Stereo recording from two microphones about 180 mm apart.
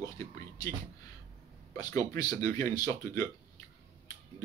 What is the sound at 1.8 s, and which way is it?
Speech, 20° left (ahead or behind).